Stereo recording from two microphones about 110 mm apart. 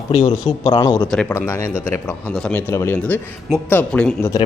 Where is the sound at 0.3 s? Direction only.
40° left (ahead or behind).